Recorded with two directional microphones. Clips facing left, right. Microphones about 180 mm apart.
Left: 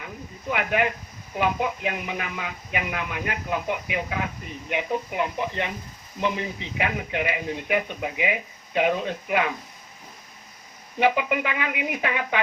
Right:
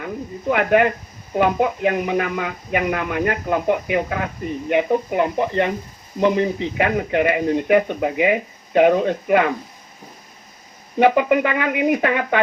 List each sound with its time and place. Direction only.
0.5 s speech: 50° right (ahead or behind)
11.0 s speech: 50° right (ahead or behind)